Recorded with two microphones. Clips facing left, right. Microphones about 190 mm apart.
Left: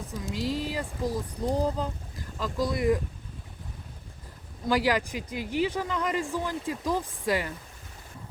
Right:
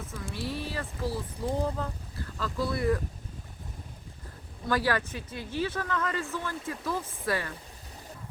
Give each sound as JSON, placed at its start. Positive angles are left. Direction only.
{"t": 0.1, "sound": "speech", "side_deg": 15}
{"t": 0.3, "sound": "speech", "side_deg": 90}
{"t": 0.7, "sound": "speech", "side_deg": 15}
{"t": 1.5, "sound": "speech", "side_deg": 35}
{"t": 1.8, "sound": "a sound", "side_deg": 15}
{"t": 2.6, "sound": "speech", "side_deg": 15}
{"t": 4.7, "sound": "speech", "side_deg": 15}